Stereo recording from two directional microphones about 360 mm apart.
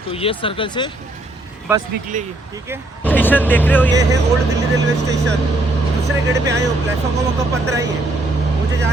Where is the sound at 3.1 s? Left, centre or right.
Centre.